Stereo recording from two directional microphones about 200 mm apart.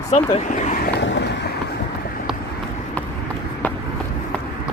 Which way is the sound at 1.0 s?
65° left (ahead or behind).